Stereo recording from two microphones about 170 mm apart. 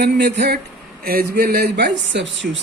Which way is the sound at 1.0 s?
60° right (ahead or behind).